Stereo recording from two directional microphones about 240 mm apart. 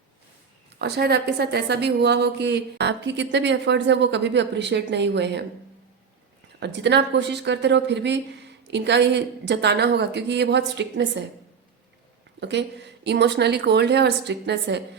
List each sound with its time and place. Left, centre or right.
0.8 s a woman's voice: right
6.6 s a woman's voice: right
12.4 s a woman's voice: right